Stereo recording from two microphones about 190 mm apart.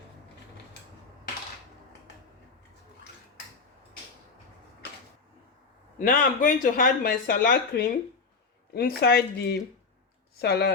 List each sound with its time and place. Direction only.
6.0 s speech: 45° left (ahead or behind)
9.0 s speech: 60° left (ahead or behind)